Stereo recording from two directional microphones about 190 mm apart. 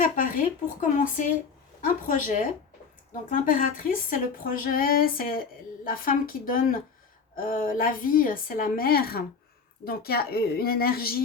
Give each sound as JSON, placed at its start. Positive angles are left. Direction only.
{"t": 0.0, "sound": "a woman's voice", "side_deg": 45}